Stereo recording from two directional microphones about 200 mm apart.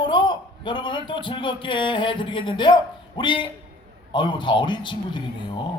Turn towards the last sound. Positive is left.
turn(degrees=20)  # may be behind; listen again after turning